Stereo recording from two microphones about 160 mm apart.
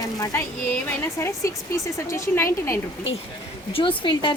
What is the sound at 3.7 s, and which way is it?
Speech, 30° left (ahead or behind).